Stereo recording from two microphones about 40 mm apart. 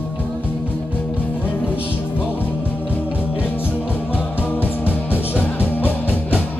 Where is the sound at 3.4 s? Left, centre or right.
Left.